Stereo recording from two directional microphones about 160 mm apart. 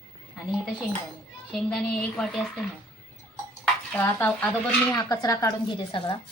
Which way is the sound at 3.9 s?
10° left (ahead or behind).